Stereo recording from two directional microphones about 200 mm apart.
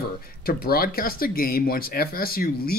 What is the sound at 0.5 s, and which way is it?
Speech, 50° left (ahead or behind).